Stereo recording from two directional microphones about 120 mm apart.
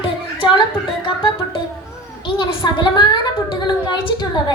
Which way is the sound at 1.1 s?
45° left (ahead or behind).